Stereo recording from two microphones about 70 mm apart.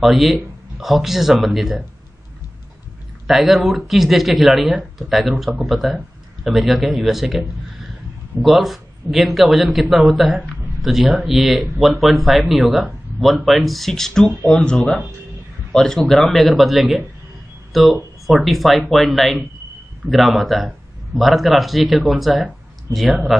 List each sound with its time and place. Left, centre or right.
0.0 s speech: centre
3.3 s speech: centre
14.5 s speech: centre